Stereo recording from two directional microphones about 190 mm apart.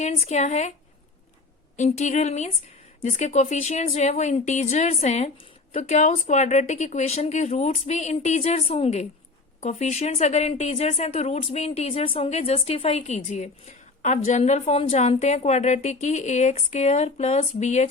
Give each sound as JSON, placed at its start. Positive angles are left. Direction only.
{"t": 0.0, "sound": "speech", "side_deg": 35}
{"t": 1.7, "sound": "speech", "side_deg": 40}